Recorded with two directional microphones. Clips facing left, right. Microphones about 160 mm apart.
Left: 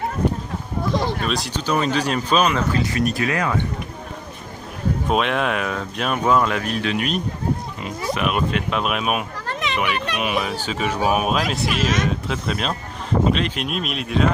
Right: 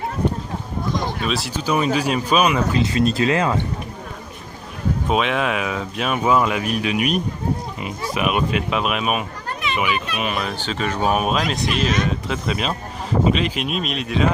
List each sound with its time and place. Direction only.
1.2 s speech: 5° right (ahead or behind)
2.7 s speech: 25° right (ahead or behind)
5.0 s speech: centre (ahead or behind)